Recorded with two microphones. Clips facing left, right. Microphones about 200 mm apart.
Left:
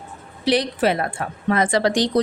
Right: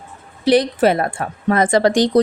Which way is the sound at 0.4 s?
50° right (ahead or behind).